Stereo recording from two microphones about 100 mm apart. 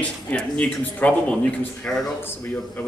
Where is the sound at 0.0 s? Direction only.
10° left (ahead or behind).